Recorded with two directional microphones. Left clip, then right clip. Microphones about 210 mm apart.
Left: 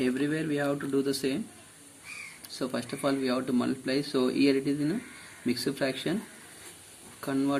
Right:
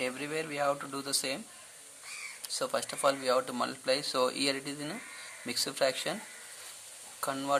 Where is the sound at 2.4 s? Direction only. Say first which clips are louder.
Right 1 dB; 25° right (ahead or behind).